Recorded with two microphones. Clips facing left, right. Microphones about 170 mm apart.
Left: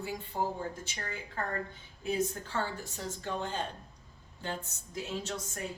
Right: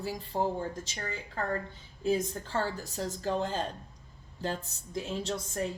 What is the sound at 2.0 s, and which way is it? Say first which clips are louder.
A woman's voice: right 3 dB; 35° right (ahead or behind).